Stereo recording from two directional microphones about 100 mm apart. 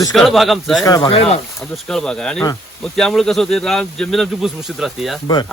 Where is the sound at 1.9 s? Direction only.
5° left (ahead or behind).